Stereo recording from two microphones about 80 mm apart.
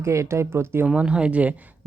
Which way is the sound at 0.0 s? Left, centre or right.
Right.